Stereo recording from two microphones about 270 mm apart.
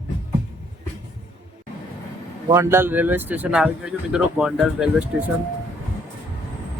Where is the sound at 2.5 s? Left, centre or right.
Centre.